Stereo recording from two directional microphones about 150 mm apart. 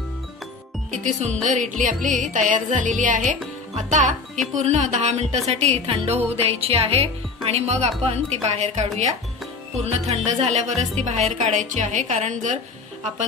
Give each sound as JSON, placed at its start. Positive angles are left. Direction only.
{"t": 1.4, "sound": "music", "side_deg": -55}
{"t": 4.6, "sound": "speech", "side_deg": -50}
{"t": 6.3, "sound": "music", "side_deg": -40}
{"t": 7.4, "sound": "speech", "side_deg": -45}